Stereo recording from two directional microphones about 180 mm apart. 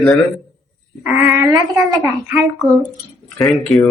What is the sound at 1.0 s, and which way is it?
Speech, 10° right (ahead or behind).